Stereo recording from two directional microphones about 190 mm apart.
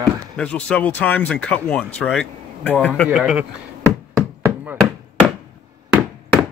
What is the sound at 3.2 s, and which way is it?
Speech, 5° right (ahead or behind).